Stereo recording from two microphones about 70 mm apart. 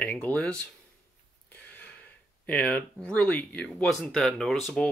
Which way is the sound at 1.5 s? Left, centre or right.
Left.